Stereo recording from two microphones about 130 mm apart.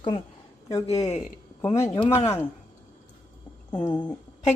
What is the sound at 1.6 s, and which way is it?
Speech, 25° left (ahead or behind).